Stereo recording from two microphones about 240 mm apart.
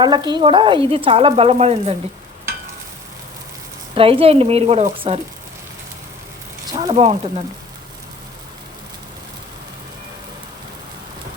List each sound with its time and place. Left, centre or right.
0.0 s speech: centre
3.9 s speech: right
6.7 s speech: centre